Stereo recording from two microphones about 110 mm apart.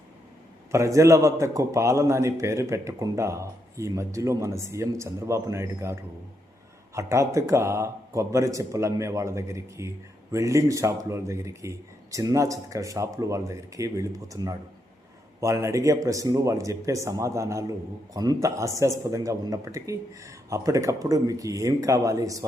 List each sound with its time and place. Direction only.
0.7 s a man's voice: 25° right (ahead or behind)